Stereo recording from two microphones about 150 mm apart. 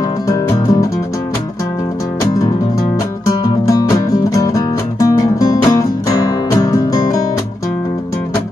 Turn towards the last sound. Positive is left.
turn(degrees=25)  # may be behind; listen again after turning